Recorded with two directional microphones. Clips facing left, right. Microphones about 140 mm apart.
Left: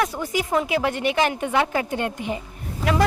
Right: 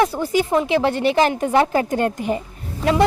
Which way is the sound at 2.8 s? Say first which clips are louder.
Right 4 dB; 25° right (ahead or behind).